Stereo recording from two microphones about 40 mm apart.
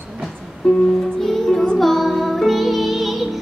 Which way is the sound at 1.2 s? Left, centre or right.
Centre.